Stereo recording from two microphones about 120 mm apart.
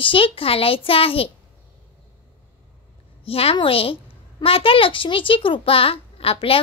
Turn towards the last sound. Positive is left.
turn(degrees=50)  # may be behind; listen again after turning